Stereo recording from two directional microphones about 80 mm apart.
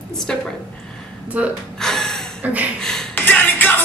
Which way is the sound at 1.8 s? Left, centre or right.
Centre.